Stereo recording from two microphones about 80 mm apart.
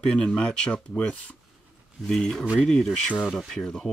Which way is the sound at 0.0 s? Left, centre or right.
Centre.